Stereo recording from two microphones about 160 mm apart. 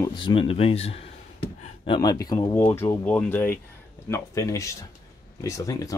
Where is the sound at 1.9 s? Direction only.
25° left (ahead or behind).